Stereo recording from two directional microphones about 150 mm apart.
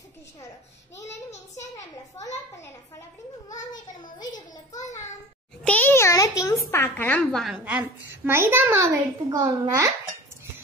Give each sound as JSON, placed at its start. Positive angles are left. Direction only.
{"t": 1.3, "sound": "a sound", "side_deg": 50}
{"t": 3.7, "sound": "a child's voice", "side_deg": 30}
{"t": 5.6, "sound": "a child's voice", "side_deg": 10}